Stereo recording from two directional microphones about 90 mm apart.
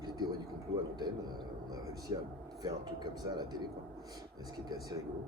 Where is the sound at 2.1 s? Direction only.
55° right (ahead or behind).